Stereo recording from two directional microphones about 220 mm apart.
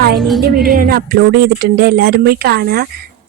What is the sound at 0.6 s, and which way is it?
Speech, 40° right (ahead or behind).